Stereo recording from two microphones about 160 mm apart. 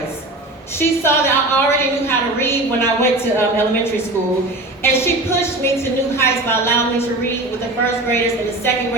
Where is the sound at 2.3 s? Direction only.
15° left (ahead or behind).